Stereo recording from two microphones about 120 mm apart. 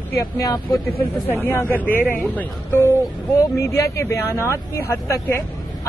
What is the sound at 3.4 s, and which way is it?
Speech, 25° left (ahead or behind).